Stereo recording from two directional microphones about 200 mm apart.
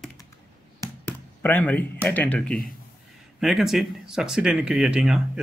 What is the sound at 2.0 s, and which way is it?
Speech, 5° left (ahead or behind).